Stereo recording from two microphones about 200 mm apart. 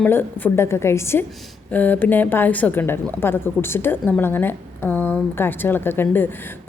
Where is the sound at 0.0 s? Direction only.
10° left (ahead or behind).